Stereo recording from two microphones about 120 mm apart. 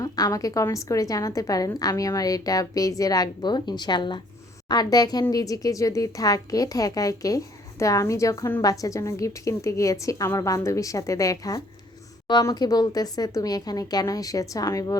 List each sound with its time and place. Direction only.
0.0 s a woman's voice: 30° left (ahead or behind)